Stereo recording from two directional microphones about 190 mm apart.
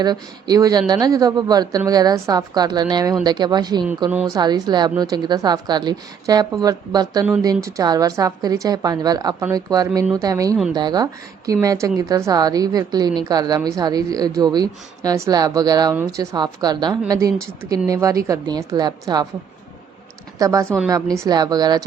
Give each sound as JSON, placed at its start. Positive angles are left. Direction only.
{"t": 0.0, "sound": "a woman's voice", "side_deg": -20}
{"t": 20.4, "sound": "a woman's voice", "side_deg": -15}